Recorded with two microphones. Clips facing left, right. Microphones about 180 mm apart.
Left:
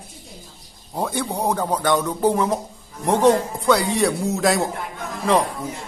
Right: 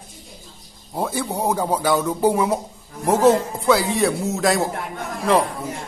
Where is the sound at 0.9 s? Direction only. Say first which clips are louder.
Even; centre (ahead or behind).